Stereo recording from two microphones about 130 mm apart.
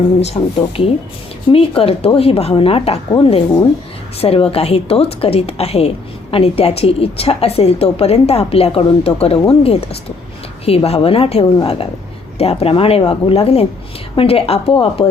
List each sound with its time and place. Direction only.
0.2 s a woman's voice: 50° left (ahead or behind)